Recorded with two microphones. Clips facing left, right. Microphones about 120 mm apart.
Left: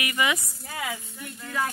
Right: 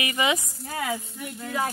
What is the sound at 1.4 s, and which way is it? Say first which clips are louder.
Speech: right 1 dB; 25° right (ahead or behind).